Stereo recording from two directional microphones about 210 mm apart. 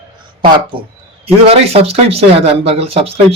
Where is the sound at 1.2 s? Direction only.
30° right (ahead or behind).